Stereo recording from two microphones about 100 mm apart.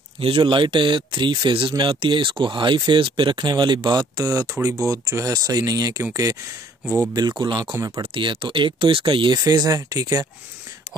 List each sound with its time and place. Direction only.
0.2 s speech: 60° right (ahead or behind); by 6.0 s 40° right (ahead or behind)
7.2 s speech: 45° right (ahead or behind)
7.7 s speech: 30° right (ahead or behind)
8.1 s speech: 55° right (ahead or behind)
9.4 s speech: 40° right (ahead or behind)